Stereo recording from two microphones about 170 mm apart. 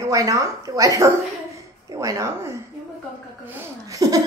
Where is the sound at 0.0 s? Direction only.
20° right (ahead or behind).